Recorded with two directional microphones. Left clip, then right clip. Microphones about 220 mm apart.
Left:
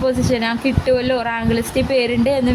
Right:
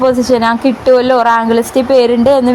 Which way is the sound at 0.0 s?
20° right (ahead or behind).